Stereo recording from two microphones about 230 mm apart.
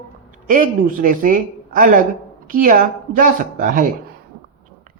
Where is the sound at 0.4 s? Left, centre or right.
Right.